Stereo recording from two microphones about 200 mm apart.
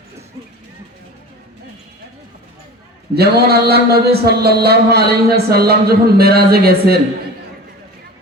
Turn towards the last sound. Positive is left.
turn(degrees=-50)  # may be behind; listen again after turning